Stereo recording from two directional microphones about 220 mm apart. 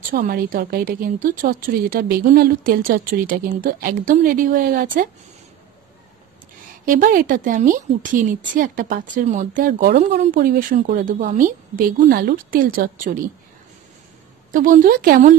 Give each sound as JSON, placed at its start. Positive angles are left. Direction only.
{"t": 0.1, "sound": "a woman's voice", "side_deg": -40}
{"t": 6.9, "sound": "a woman's voice", "side_deg": -40}
{"t": 14.5, "sound": "a woman's voice", "side_deg": -40}